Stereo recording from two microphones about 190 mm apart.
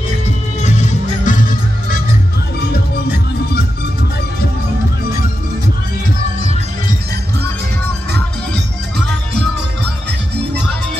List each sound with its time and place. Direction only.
0.7 s music: 40° left (ahead or behind)